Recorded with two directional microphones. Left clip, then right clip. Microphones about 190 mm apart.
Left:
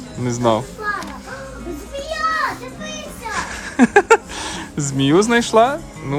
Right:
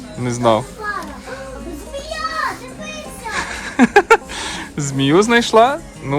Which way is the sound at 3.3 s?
10° left (ahead or behind).